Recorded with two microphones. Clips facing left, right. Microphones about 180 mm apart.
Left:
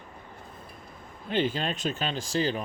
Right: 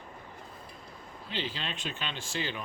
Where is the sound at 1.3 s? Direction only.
50° left (ahead or behind).